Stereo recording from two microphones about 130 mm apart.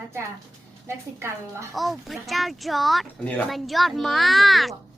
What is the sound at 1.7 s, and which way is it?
A child's voice, centre (ahead or behind).